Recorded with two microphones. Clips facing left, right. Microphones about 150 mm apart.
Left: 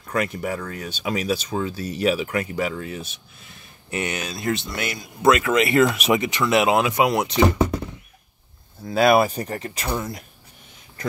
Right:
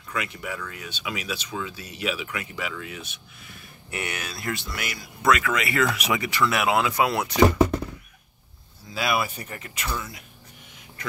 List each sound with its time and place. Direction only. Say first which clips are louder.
0.1 s speech: left 7 dB; 45° left (ahead or behind)
3.9 s speech: left 5 dB; 20° left (ahead or behind)
8.8 s speech: left 10 dB; 50° left (ahead or behind)